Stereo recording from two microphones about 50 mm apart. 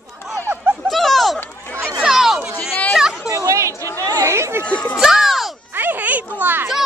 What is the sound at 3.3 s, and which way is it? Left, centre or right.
Chatter, right.